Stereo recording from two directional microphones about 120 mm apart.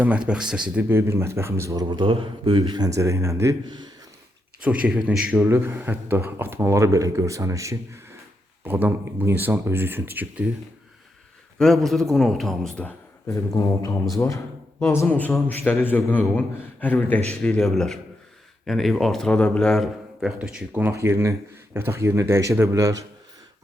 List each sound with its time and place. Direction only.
0.0 s speech: 10° right (ahead or behind)
0.9 s a man's voice: 20° right (ahead or behind)
1.8 s speech: 40° right (ahead or behind); by 3.5 s 25° right (ahead or behind)
4.6 s a man's voice: 10° right (ahead or behind)
11.5 s speech: 5° left (ahead or behind)
13.2 s a man's voice: 25° left (ahead or behind); by 20.9 s 10° right (ahead or behind)
20.9 s a man's voice: 20° right (ahead or behind)